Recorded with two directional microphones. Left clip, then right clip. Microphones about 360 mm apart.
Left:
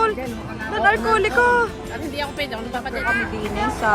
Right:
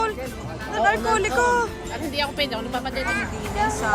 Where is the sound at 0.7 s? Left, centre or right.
Centre.